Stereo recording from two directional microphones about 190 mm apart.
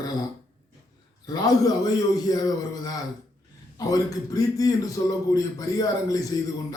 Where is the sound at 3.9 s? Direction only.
20° left (ahead or behind).